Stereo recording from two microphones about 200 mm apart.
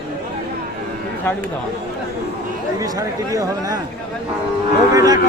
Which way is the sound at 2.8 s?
15° right (ahead or behind).